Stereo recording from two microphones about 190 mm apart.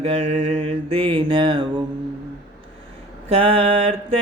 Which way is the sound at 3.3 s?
30° right (ahead or behind).